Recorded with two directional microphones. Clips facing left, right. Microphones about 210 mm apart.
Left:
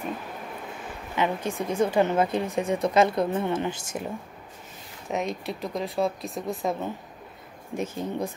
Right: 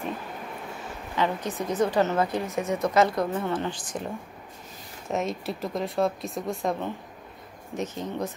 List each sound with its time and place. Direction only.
1.1 s speech: 15° left (ahead or behind)
2.6 s speech: 30° left (ahead or behind)
5.0 s speech: centre (ahead or behind)